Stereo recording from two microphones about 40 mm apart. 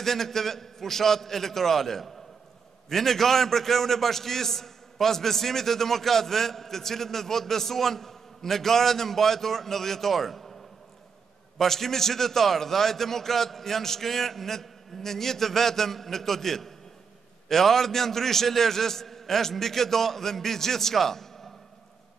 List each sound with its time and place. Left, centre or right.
0.0 s a man's voice: centre
11.5 s a man's voice: centre